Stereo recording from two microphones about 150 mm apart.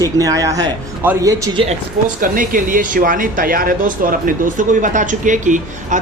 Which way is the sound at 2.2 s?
65° right (ahead or behind).